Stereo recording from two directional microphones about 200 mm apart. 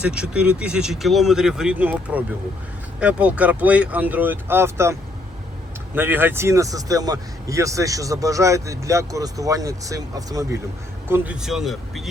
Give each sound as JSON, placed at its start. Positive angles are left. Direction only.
{"t": 0.0, "sound": "speech", "side_deg": -5}
{"t": 11.1, "sound": "speech", "side_deg": -5}